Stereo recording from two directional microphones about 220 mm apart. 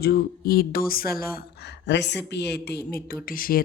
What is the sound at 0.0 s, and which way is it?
Speech, 45° left (ahead or behind).